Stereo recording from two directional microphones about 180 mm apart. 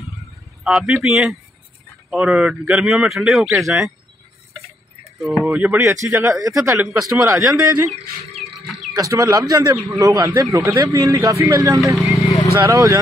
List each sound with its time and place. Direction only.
0.7 s speech: 5° right (ahead or behind)
5.2 s a man's voice: centre (ahead or behind)
7.9 s speech: 35° right (ahead or behind)
8.5 s a sound: centre (ahead or behind)
8.9 s a man's voice: 20° right (ahead or behind)